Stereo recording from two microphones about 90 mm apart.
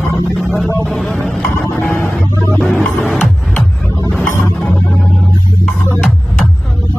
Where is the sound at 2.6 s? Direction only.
10° left (ahead or behind).